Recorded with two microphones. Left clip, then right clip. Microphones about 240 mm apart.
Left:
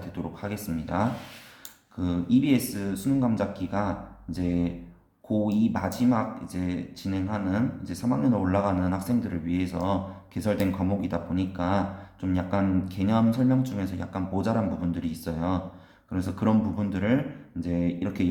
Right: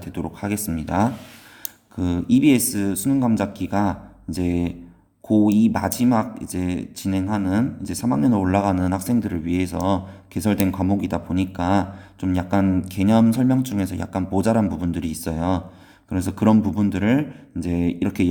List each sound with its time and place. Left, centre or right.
0.0 s speech: right